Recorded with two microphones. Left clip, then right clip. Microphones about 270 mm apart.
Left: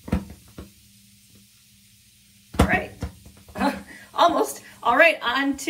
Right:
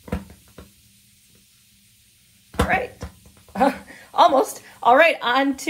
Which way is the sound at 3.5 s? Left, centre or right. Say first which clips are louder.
Right 6 dB; right.